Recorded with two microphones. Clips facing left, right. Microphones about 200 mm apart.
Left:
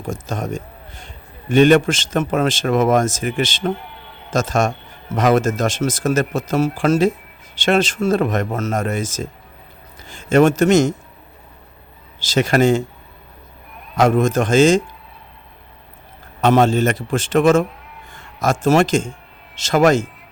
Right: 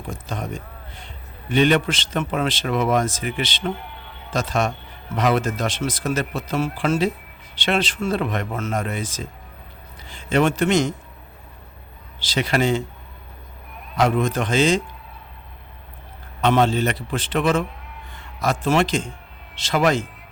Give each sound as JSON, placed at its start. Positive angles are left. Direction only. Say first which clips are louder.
{"t": 0.1, "sound": "a man's voice", "louder": "left 5 dB", "side_deg": 45}
{"t": 12.2, "sound": "speech", "louder": "left 6 dB", "side_deg": 45}
{"t": 13.9, "sound": "speech", "louder": "left 5 dB", "side_deg": 45}
{"t": 16.4, "sound": "a man's voice", "louder": "left 4 dB", "side_deg": 45}